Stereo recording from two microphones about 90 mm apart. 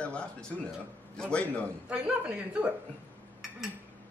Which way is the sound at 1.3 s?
15° left (ahead or behind).